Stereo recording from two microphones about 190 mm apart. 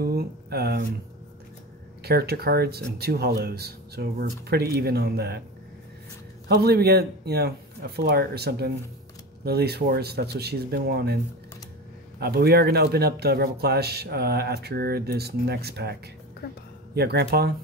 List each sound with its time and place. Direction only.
0.0 s speech: 55° right (ahead or behind)
2.0 s speech: 55° right (ahead or behind)
6.5 s speech: 55° right (ahead or behind)
12.2 s speech: 55° right (ahead or behind)